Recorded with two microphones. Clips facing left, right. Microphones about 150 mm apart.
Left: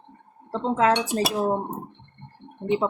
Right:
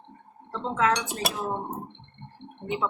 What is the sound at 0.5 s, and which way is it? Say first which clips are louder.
Speech: left 4 dB; 35° left (ahead or behind).